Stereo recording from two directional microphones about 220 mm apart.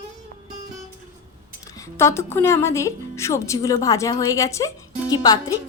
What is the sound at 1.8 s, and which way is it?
Speech, 10° left (ahead or behind).